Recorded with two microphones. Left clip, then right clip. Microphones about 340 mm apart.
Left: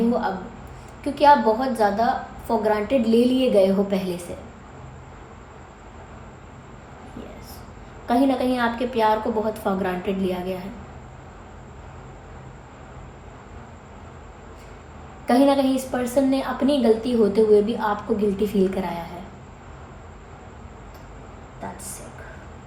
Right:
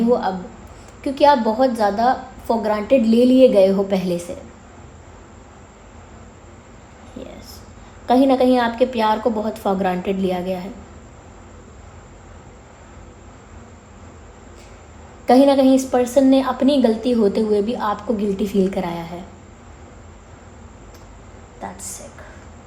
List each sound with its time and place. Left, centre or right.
1.0 s a woman's voice: right
8.0 s a woman's voice: right
15.3 s a woman's voice: right